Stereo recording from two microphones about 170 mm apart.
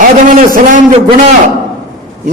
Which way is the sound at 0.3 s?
50° right (ahead or behind).